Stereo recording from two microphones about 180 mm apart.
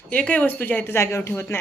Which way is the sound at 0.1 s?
10° left (ahead or behind).